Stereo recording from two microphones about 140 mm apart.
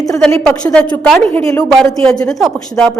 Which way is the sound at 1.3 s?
20° left (ahead or behind).